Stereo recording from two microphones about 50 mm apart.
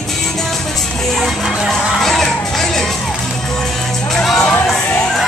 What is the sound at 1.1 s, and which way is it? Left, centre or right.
Music, centre.